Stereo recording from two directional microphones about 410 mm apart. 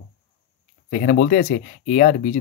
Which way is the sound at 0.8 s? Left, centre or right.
Centre.